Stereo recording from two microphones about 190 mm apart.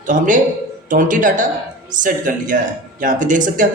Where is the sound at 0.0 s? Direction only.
40° right (ahead or behind).